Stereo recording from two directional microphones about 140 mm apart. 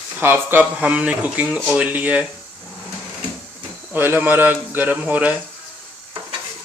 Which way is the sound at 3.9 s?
15° right (ahead or behind).